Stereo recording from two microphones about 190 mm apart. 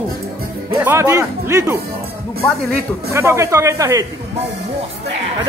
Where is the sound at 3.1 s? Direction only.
15° right (ahead or behind).